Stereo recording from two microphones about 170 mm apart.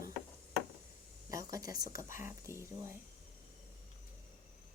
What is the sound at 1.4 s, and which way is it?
Speech, 20° right (ahead or behind).